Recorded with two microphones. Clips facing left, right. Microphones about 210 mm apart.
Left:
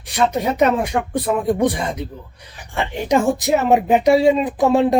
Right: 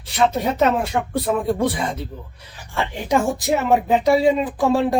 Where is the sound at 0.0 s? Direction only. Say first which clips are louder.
Left 1 dB; 15° left (ahead or behind).